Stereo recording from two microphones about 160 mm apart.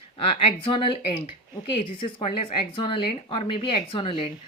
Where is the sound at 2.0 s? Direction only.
35° left (ahead or behind).